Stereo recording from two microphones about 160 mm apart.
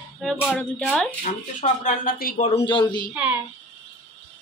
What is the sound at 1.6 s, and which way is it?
Speech, 50° left (ahead or behind).